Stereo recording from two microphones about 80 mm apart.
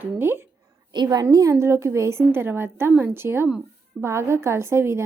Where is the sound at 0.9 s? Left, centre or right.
Right.